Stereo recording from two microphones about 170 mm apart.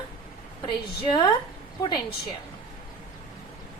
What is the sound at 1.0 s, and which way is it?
Speech, 30° left (ahead or behind).